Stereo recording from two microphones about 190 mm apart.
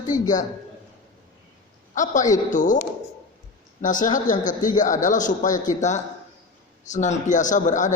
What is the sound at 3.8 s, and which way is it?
A man's voice, 45° left (ahead or behind).